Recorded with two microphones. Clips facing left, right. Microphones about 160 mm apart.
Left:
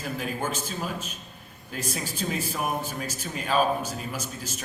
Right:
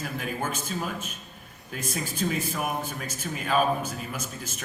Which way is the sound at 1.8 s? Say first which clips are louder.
Right 2 dB; 50° right (ahead or behind).